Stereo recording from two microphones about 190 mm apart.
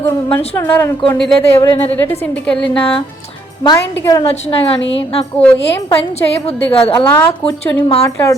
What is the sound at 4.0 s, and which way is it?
Speech, 15° left (ahead or behind).